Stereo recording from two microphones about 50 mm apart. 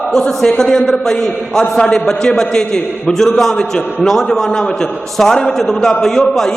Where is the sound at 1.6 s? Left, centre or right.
Left.